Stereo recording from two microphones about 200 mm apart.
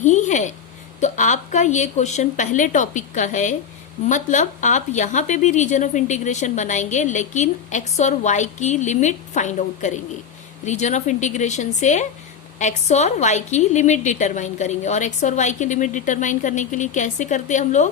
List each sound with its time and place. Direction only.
0.0 s speech: 40° left (ahead or behind)